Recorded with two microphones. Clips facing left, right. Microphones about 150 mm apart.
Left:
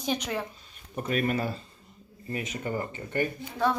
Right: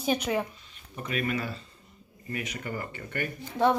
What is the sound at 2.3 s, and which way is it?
Speech, 25° left (ahead or behind).